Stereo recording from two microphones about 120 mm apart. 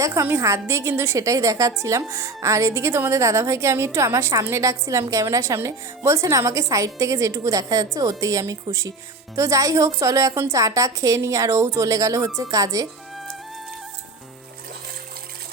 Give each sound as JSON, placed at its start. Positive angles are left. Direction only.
{"t": 0.0, "sound": "a woman's voice", "side_deg": -25}